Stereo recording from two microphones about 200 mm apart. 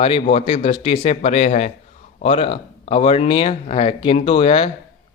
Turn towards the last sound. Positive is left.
turn(degrees=25)  # may be behind; listen again after turning